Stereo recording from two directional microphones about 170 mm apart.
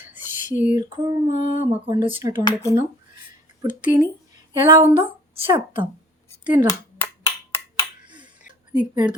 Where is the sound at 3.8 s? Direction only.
10° right (ahead or behind).